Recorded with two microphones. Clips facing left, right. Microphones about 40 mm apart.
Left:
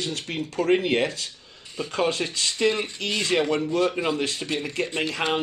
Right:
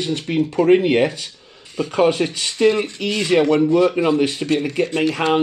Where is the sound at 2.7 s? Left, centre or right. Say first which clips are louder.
Right 7 dB; right.